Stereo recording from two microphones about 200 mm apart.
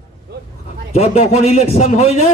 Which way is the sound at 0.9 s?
30° left (ahead or behind).